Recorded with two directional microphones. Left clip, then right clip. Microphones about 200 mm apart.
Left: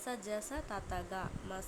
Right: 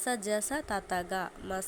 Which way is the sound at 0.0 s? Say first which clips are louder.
Right 8 dB; 20° right (ahead or behind).